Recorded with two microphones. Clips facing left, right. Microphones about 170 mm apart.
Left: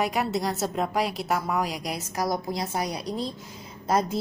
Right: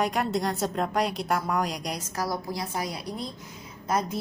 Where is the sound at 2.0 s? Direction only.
15° left (ahead or behind).